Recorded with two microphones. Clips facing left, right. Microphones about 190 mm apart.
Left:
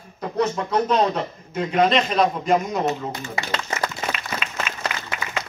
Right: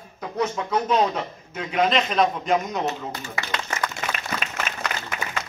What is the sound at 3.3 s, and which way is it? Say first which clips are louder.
Speech: left 1 dB; 30° left (ahead or behind).